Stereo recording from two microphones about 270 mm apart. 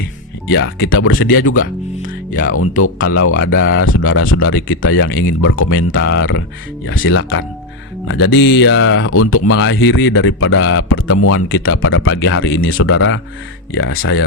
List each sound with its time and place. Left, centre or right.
0.4 s speech: left
2.8 s speech: left